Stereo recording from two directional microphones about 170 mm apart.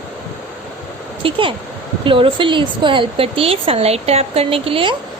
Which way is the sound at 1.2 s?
30° right (ahead or behind).